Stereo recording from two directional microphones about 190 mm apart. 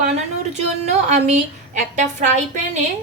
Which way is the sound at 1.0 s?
40° right (ahead or behind).